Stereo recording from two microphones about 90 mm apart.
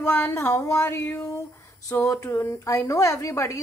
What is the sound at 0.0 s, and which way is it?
A woman's voice, 30° left (ahead or behind).